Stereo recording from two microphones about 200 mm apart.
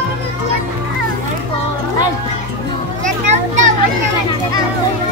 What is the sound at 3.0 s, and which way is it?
Children playing, 40° right (ahead or behind).